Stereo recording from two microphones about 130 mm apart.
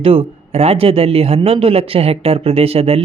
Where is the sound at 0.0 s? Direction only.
45° right (ahead or behind).